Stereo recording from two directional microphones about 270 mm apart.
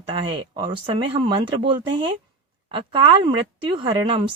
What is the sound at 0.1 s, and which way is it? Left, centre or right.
Speech, centre.